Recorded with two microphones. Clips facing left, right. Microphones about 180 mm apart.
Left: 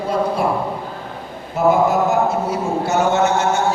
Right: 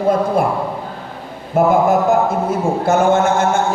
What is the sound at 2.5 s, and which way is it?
A man's voice, 50° right (ahead or behind).